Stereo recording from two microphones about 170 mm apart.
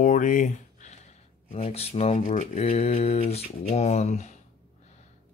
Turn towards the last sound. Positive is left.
turn(degrees=45)  # may be behind; listen again after turning